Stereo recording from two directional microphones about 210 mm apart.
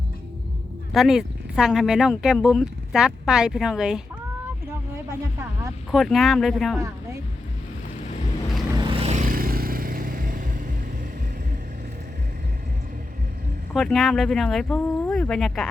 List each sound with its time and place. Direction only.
0.9 s speech: centre (ahead or behind)
5.0 s speech: 15° right (ahead or behind)
5.9 s speech: centre (ahead or behind)
6.7 s speech: 15° right (ahead or behind)
8.8 s vehicle: 25° right (ahead or behind)
13.7 s speech: centre (ahead or behind)